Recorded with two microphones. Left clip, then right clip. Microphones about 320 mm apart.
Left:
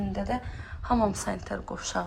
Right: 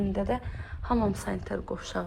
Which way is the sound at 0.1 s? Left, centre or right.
Centre.